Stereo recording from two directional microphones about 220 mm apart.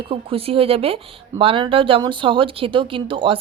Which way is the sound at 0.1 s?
25° right (ahead or behind).